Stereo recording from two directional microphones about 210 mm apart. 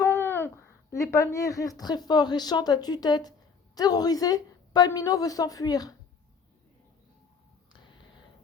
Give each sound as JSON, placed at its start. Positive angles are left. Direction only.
{"t": 0.0, "sound": "babbling", "side_deg": 10}
{"t": 1.1, "sound": "a woman's voice", "side_deg": 15}